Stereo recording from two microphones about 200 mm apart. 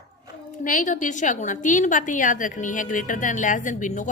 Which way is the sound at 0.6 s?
40° left (ahead or behind).